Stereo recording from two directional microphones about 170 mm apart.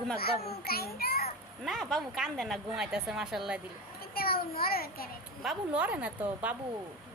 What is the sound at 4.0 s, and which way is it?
A child's voice, 60° left (ahead or behind).